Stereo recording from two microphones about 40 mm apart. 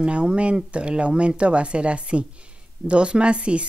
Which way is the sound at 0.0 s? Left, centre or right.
Right.